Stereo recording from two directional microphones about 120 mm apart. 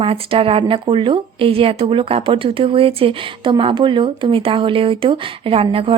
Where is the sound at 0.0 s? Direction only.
50° right (ahead or behind).